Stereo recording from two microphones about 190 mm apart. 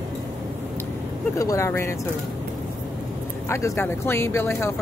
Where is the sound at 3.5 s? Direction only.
15° left (ahead or behind).